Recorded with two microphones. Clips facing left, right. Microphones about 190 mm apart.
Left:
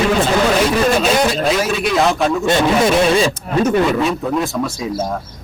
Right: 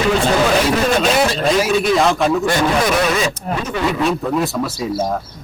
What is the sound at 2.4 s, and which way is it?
Speech, 25° left (ahead or behind).